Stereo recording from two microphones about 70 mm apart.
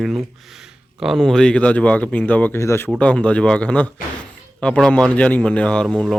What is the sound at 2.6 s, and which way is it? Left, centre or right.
Speech, left.